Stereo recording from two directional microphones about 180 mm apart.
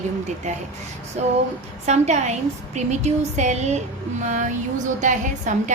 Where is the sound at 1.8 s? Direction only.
40° right (ahead or behind).